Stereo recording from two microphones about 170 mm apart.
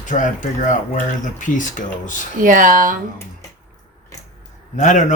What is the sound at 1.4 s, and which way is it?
Speech, 50° left (ahead or behind).